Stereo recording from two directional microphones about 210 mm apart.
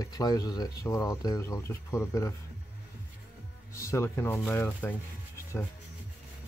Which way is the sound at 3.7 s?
15° left (ahead or behind).